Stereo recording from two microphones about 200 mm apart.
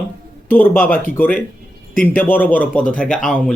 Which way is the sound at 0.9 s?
45° left (ahead or behind).